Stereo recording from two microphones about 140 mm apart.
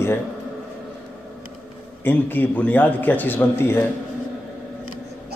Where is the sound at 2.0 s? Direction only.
15° left (ahead or behind).